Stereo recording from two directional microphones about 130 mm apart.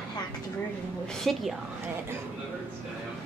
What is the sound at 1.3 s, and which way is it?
Speech, centre (ahead or behind).